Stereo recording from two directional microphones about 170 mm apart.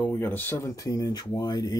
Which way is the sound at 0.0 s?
10° left (ahead or behind).